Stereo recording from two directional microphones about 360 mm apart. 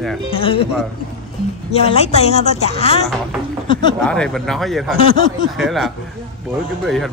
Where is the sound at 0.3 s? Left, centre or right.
Centre.